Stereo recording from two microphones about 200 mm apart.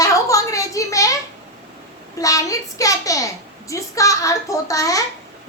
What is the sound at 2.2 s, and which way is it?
A woman's voice, 15° left (ahead or behind).